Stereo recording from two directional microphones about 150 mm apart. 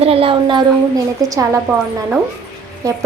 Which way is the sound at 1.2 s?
25° right (ahead or behind).